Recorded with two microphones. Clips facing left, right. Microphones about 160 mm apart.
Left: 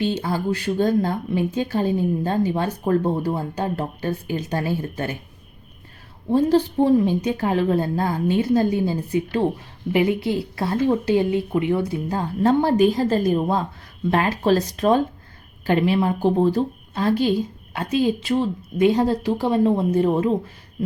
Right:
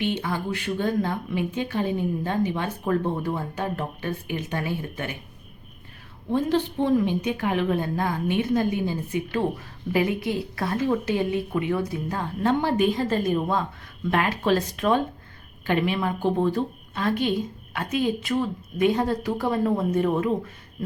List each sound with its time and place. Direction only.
0.0 s a woman's voice: 35° left (ahead or behind)
6.3 s a woman's voice: 40° left (ahead or behind)